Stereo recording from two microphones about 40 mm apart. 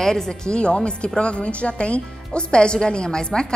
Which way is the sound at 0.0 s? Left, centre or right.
Centre.